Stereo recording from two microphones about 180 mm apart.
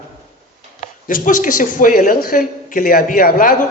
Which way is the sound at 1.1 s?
50° left (ahead or behind).